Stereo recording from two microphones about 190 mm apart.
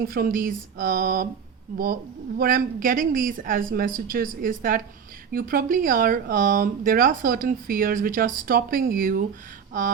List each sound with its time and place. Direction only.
0.1 s speech: 50° right (ahead or behind)
2.4 s speech: 50° right (ahead or behind)